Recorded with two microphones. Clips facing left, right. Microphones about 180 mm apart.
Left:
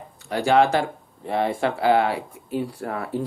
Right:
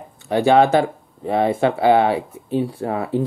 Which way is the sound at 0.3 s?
20° right (ahead or behind).